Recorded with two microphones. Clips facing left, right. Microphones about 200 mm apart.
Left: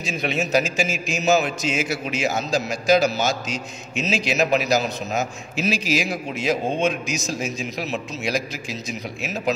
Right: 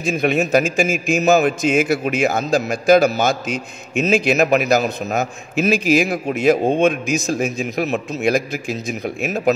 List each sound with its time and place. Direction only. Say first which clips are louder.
0.0 s a man's voice: right 7 dB; 50° right (ahead or behind)